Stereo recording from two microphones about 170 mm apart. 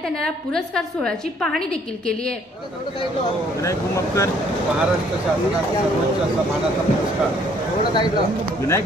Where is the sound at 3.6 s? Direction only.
15° left (ahead or behind).